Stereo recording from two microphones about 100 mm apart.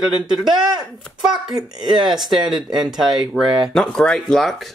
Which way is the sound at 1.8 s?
5° right (ahead or behind).